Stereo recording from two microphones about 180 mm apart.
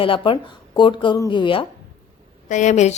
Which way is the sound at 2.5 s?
40° left (ahead or behind).